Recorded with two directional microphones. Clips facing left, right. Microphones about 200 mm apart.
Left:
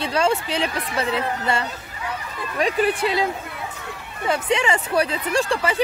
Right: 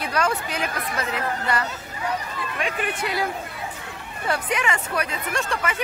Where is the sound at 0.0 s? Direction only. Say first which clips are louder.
Left 4 dB; 25° left (ahead or behind).